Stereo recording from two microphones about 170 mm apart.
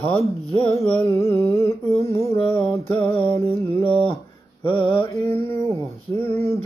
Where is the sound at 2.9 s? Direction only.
10° left (ahead or behind).